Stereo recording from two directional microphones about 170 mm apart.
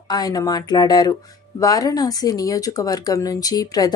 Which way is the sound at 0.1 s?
20° left (ahead or behind).